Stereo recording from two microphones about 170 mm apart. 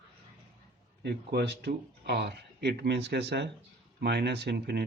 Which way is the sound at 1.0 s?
75° right (ahead or behind).